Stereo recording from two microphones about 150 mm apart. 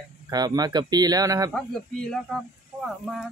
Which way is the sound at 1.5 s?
5° left (ahead or behind).